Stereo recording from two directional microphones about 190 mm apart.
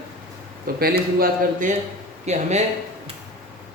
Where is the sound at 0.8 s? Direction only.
50° right (ahead or behind).